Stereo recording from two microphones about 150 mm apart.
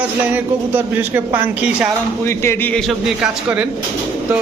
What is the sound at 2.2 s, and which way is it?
Speech, 15° left (ahead or behind).